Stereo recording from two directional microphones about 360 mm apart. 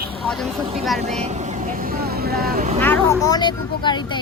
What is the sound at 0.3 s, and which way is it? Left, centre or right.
Speech, centre.